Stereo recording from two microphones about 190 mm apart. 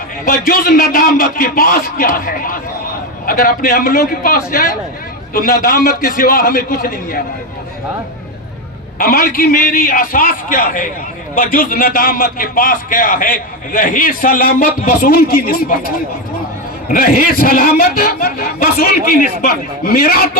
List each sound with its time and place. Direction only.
0.3 s a man's voice: 55° left (ahead or behind)
9.0 s a man's voice: 50° left (ahead or behind)
16.9 s a man's voice: 50° left (ahead or behind)